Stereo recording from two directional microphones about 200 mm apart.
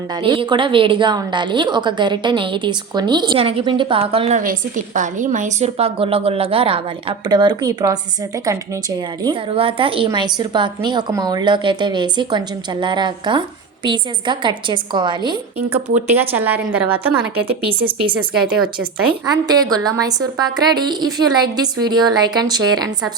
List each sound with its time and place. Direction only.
0.2 s a woman's voice: 25° right (ahead or behind)
16.0 s speech: 10° right (ahead or behind)
19.2 s a woman's voice: 20° right (ahead or behind)